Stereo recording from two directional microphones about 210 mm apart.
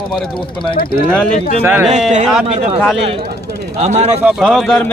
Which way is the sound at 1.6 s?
10° right (ahead or behind).